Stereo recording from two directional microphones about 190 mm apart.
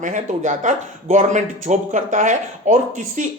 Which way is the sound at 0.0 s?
40° right (ahead or behind).